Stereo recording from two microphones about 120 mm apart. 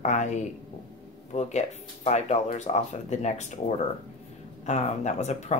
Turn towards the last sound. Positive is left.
turn(degrees=70)  # may be behind; listen again after turning